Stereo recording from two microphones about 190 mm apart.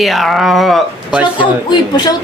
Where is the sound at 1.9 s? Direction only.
20° left (ahead or behind).